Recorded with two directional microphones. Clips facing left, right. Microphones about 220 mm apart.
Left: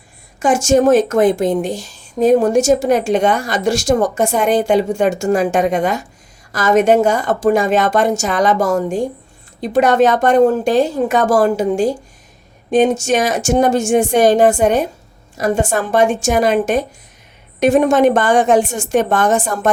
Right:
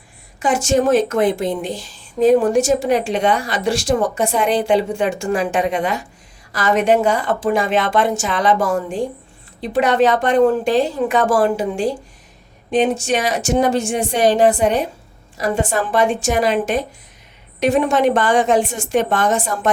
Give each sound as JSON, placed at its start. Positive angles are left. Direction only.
{"t": 0.3, "sound": "speech", "side_deg": 45}